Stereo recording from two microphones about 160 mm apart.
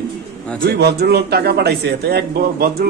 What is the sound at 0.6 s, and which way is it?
A man's voice, 85° right.